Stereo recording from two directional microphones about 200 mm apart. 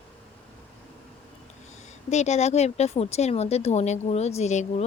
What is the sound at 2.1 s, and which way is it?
Speech, 35° left (ahead or behind).